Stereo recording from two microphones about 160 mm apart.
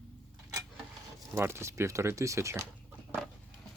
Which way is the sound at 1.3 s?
15° right (ahead or behind).